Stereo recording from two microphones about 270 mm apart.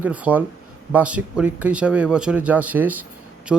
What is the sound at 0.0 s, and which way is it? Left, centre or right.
Speech, centre.